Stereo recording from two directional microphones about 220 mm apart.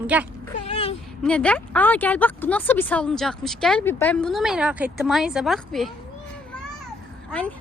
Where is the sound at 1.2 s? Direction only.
5° left (ahead or behind).